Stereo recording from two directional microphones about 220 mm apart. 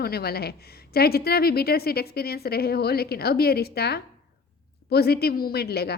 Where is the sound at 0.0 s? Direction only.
45° left (ahead or behind).